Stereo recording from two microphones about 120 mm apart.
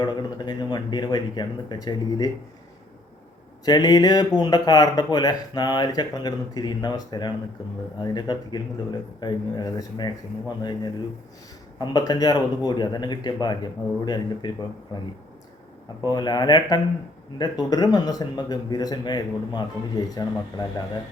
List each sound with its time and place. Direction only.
0.0 s speech: 35° left (ahead or behind)
3.7 s speech: 35° left (ahead or behind)
11.8 s speech: 35° left (ahead or behind)
16.0 s speech: 35° left (ahead or behind)